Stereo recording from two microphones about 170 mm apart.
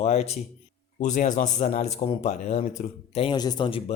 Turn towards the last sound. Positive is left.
turn(degrees=25)  # may be behind; listen again after turning